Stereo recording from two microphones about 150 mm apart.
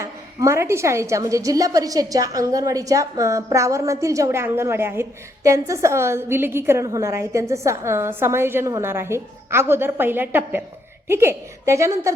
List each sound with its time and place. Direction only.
0.0 s a woman's voice: 20° right (ahead or behind)